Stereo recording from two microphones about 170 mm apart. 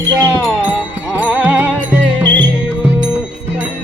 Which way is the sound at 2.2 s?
90° right.